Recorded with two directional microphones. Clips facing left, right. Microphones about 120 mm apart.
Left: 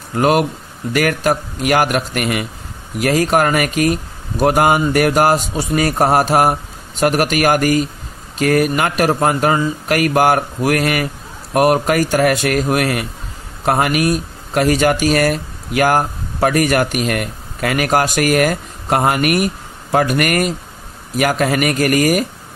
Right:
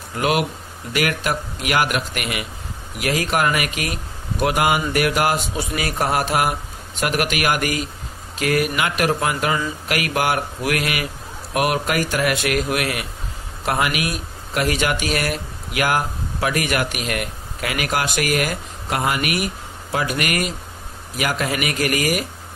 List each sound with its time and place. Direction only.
0.2 s speech: 40° left (ahead or behind)